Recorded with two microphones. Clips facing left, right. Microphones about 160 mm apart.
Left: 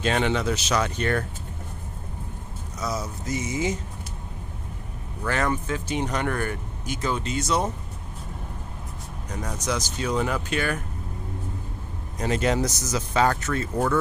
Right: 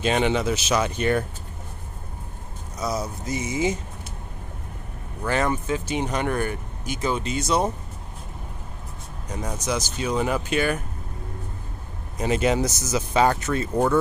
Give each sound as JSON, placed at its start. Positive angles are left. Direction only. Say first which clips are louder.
{"t": 0.0, "sound": "speech", "louder": "right 2 dB", "side_deg": -15}
{"t": 2.9, "sound": "a sound", "louder": "right 2 dB", "side_deg": -35}
{"t": 5.2, "sound": "speech", "louder": "right 2 dB", "side_deg": -20}
{"t": 9.4, "sound": "speech", "louder": "right 1 dB", "side_deg": -20}
{"t": 12.2, "sound": "speech", "louder": "right 2 dB", "side_deg": -10}
{"t": 13.1, "sound": "speech", "louder": "right 2 dB", "side_deg": -15}